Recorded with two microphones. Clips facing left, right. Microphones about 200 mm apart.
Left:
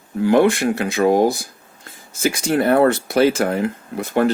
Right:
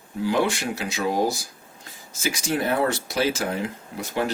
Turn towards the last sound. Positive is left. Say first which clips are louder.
# left 8 dB
turn(degrees=55)  # may be behind; listen again after turning